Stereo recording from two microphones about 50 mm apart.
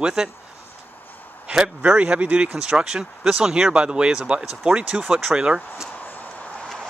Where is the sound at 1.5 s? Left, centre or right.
Centre.